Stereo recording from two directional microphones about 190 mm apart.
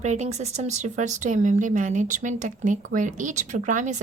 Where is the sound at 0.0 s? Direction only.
35° right (ahead or behind).